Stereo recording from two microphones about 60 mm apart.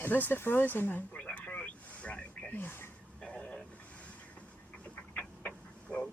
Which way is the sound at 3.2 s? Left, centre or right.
Centre.